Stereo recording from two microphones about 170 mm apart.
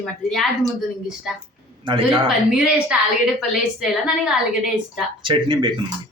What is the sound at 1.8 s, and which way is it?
Speech, 30° right (ahead or behind).